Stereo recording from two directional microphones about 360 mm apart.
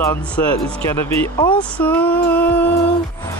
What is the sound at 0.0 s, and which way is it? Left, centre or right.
Speech, centre.